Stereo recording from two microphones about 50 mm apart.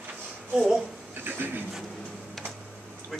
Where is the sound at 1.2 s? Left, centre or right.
Right.